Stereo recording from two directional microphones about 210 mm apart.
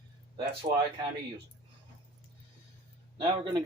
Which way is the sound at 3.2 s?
20° right (ahead or behind).